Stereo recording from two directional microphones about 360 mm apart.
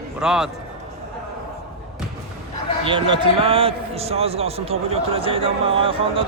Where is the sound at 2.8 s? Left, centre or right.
Centre.